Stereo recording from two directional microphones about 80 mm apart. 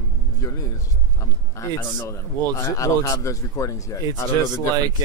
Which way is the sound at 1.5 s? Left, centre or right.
Left.